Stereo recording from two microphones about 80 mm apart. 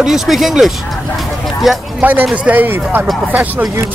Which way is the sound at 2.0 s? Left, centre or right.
Right.